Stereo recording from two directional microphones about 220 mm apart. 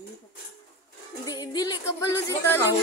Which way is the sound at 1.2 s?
20° left (ahead or behind).